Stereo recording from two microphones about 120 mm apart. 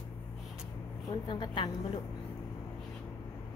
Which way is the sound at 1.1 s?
40° left (ahead or behind).